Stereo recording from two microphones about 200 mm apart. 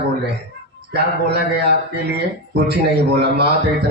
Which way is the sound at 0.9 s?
55° right (ahead or behind).